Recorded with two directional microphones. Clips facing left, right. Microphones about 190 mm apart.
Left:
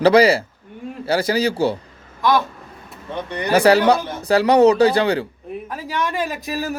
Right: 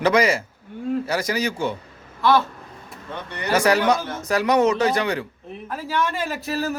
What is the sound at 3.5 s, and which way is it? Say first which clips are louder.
A man's voice: left 5 dB; 35° left (ahead or behind).